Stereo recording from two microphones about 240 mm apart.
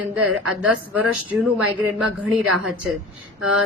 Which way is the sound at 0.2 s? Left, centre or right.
Right.